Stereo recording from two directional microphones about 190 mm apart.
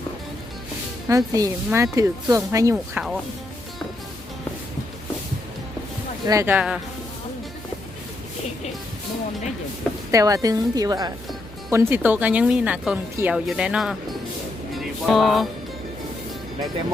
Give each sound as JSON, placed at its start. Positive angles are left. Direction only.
{"t": 1.0, "sound": "speech", "side_deg": -20}
{"t": 2.7, "sound": "speech", "side_deg": -5}
{"t": 6.2, "sound": "speech", "side_deg": -15}
{"t": 10.1, "sound": "a woman's voice", "side_deg": -20}
{"t": 14.8, "sound": "music", "side_deg": 0}